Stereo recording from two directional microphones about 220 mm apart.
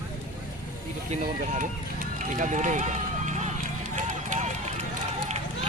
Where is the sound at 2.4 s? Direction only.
35° right (ahead or behind).